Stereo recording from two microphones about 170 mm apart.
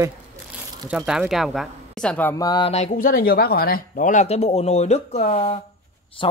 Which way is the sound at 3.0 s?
60° left (ahead or behind).